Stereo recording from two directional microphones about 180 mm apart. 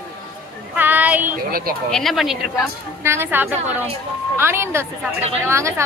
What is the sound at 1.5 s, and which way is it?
Speech, 55° right (ahead or behind).